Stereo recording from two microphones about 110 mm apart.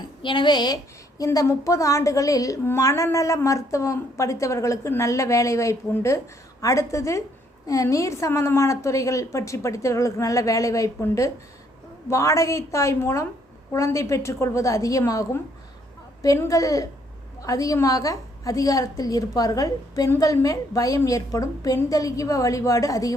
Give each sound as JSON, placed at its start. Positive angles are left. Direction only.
{"t": 0.2, "sound": "a woman's voice", "side_deg": 50}